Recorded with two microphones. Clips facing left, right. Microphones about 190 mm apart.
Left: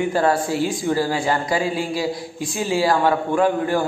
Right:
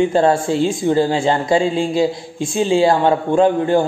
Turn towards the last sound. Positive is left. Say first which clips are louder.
# right 5 dB
turn(degrees=-25)  # may be behind; listen again after turning